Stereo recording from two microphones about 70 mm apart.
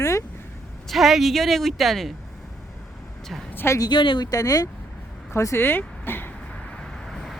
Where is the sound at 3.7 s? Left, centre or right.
Left.